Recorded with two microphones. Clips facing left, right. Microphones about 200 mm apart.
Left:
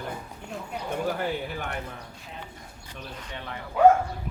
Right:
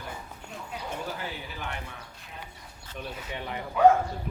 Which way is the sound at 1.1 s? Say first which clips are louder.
Left 8 dB; 55° left (ahead or behind).